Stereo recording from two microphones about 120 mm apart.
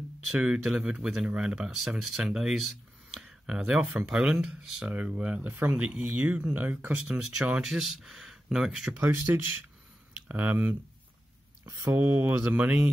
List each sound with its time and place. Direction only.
0.3 s speech: 10° right (ahead or behind)
8.9 s speech: 20° right (ahead or behind)